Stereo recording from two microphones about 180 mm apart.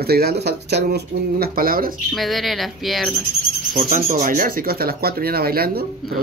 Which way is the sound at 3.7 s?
50° right (ahead or behind).